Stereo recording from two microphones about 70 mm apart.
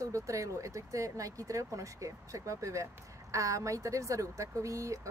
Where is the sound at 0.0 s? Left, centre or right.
Right.